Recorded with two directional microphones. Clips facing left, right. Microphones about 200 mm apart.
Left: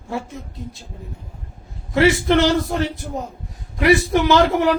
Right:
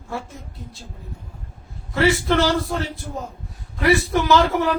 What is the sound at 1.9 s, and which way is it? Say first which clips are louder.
Speech: left 3 dB; 20° left (ahead or behind).